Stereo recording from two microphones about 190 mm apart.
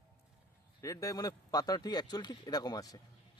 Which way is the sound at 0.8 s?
15° left (ahead or behind).